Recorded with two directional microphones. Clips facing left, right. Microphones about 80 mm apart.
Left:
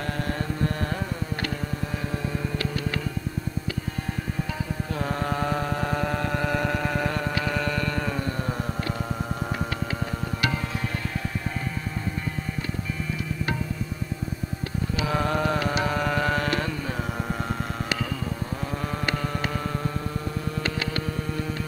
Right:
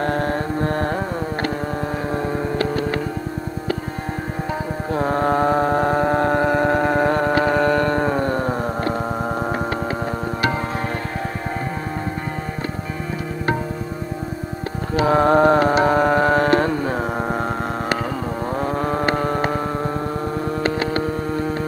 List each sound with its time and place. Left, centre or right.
0.0 s carnatic music: right
2.0 s music: right
4.9 s mantra: right
15.0 s carnatic music: right
18.5 s vehicle: right